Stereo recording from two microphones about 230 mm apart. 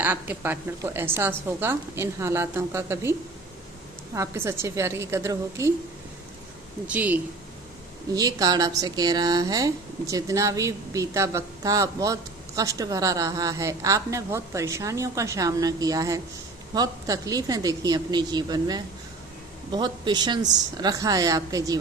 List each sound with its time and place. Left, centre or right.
0.0 s speech: centre
6.8 s speech: centre